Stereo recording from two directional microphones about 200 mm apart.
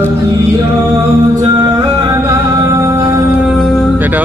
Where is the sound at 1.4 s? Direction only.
15° right (ahead or behind).